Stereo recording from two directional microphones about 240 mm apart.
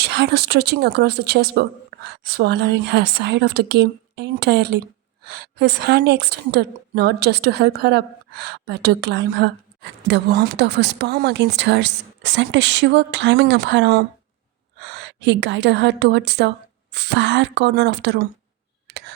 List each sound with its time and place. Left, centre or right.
0.0 s a woman's voice: right